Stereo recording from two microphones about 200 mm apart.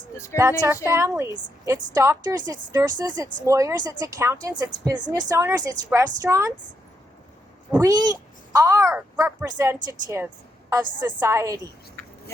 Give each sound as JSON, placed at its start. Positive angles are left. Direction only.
{"t": 0.3, "sound": "speech", "side_deg": -15}
{"t": 7.7, "sound": "a woman's voice", "side_deg": -15}
{"t": 12.0, "sound": "a sound", "side_deg": 10}